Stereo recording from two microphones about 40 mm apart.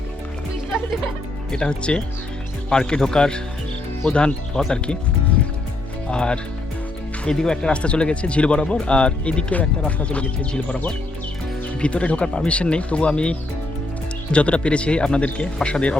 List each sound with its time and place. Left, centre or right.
1.5 s speech: centre
6.1 s speech: left
14.3 s speech: left